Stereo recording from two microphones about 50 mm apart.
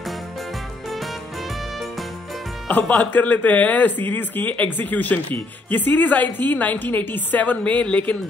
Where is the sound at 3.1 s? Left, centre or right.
Left.